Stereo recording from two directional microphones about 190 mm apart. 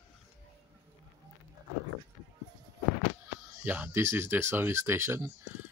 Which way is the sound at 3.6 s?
10° right (ahead or behind).